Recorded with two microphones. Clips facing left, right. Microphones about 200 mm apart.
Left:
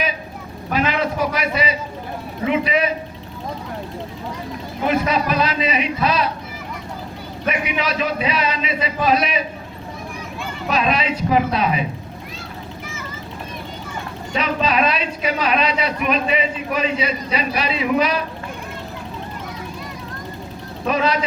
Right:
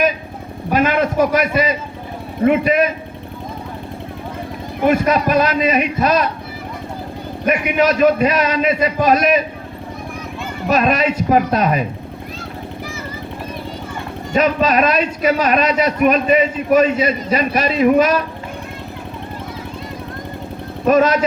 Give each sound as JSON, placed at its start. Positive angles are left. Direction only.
{"t": 0.7, "sound": "a sound", "side_deg": -50}
{"t": 2.4, "sound": "a man's voice", "side_deg": -50}
{"t": 4.9, "sound": "a man's voice", "side_deg": -50}
{"t": 7.4, "sound": "a man's voice", "side_deg": -50}
{"t": 10.7, "sound": "a man's voice", "side_deg": -50}
{"t": 14.3, "sound": "a man's voice", "side_deg": -45}
{"t": 20.8, "sound": "speech", "side_deg": -45}